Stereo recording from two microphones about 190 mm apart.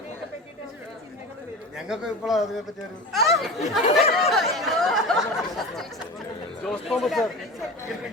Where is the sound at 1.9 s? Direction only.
Centre (ahead or behind).